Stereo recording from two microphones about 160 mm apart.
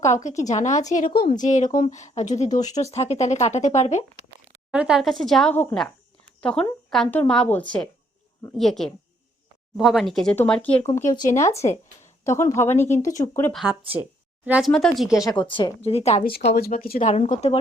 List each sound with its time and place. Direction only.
0.1 s speech: 50° left (ahead or behind)
4.7 s a woman's voice: 5° right (ahead or behind)
11.3 s a woman's voice: 20° left (ahead or behind)
13.5 s a woman's voice: centre (ahead or behind)
14.7 s a woman's voice: 5° left (ahead or behind)
15.1 s speech: 20° left (ahead or behind); by 16.2 s 40° left (ahead or behind)
16.5 s speech: 70° left (ahead or behind)
17.1 s speech: 50° left (ahead or behind)